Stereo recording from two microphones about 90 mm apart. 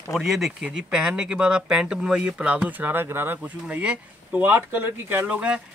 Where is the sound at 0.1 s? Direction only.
5° right (ahead or behind).